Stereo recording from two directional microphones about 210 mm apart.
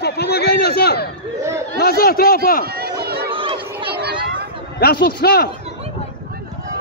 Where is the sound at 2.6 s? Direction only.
50° right (ahead or behind).